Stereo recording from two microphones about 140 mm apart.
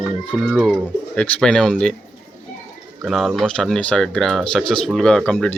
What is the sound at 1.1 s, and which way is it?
Speech, 10° left (ahead or behind).